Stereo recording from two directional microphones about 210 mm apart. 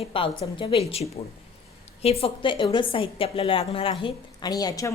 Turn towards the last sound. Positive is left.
turn(degrees=15)  # may be behind; listen again after turning